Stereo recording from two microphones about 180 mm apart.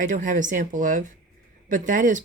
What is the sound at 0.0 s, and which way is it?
Speech, 45° right (ahead or behind).